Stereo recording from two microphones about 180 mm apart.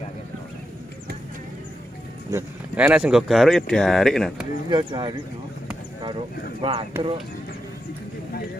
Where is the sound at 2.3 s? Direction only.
10° right (ahead or behind).